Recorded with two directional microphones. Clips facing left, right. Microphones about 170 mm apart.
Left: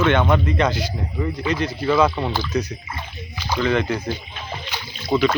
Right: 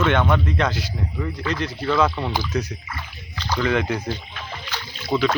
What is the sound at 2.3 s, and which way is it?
Speech, 10° right (ahead or behind).